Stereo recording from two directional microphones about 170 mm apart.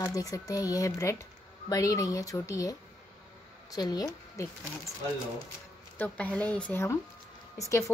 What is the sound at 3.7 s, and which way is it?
Speech, 20° left (ahead or behind).